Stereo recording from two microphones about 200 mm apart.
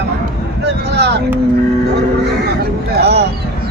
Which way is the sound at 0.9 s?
55° right (ahead or behind).